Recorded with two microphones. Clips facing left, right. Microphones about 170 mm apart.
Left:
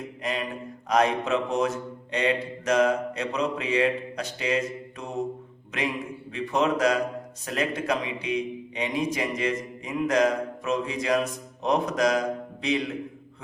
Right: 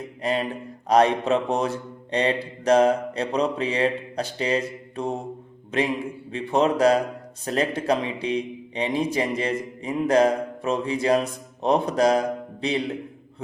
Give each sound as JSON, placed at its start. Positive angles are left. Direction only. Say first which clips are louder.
{"t": 0.2, "sound": "a man's voice", "louder": "right 6 dB", "side_deg": -30}
{"t": 6.3, "sound": "a man's voice", "louder": "right 3 dB", "side_deg": -30}